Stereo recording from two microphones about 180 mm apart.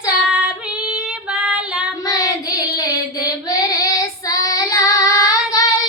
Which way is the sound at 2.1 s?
20° left (ahead or behind).